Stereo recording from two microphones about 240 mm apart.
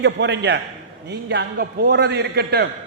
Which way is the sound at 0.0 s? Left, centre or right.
Right.